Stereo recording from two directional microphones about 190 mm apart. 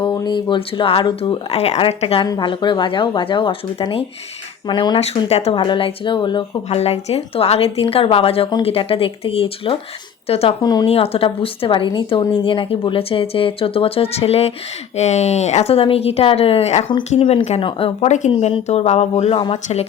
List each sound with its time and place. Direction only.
0.0 s a woman's voice: 25° left (ahead or behind)
10.6 s a woman's voice: 20° left (ahead or behind)